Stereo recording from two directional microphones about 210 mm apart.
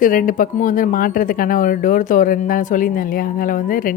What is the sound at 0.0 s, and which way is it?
Speech, 40° left (ahead or behind).